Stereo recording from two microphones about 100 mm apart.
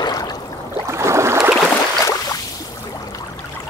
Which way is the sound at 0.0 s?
40° left (ahead or behind).